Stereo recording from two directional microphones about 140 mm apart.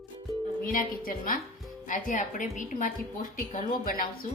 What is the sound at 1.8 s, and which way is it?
A woman's voice, 65° left (ahead or behind).